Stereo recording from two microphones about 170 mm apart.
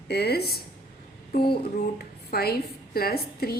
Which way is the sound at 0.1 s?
70° left (ahead or behind).